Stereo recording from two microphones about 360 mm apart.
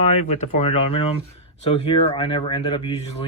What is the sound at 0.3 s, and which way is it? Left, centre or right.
Speech, centre.